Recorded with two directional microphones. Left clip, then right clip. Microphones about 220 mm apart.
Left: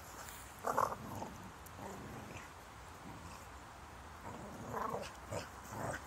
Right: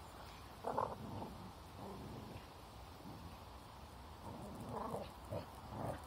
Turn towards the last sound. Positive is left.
turn(degrees=15)  # may be behind; listen again after turning